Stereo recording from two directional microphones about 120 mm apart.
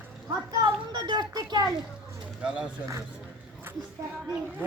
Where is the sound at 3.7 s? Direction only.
20° right (ahead or behind).